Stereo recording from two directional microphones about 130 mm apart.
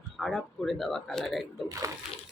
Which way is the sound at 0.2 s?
5° right (ahead or behind).